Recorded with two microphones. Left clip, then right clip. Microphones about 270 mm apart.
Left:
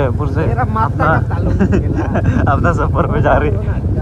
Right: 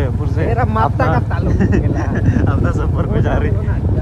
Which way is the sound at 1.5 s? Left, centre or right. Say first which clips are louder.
Left 1 dB; centre.